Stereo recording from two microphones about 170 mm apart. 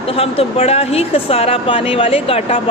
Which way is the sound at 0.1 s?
35° left (ahead or behind).